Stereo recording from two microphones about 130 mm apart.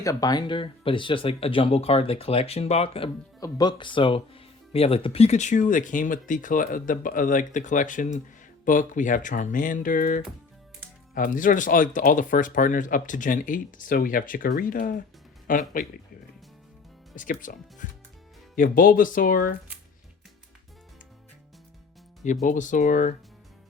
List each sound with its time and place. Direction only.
0.0 s speech: 25° left (ahead or behind); by 3.1 s 50° left (ahead or behind)
3.4 s speech: 35° left (ahead or behind); by 15.9 s 90° left
17.2 s speech: 90° left
22.2 s speech: 70° left (ahead or behind)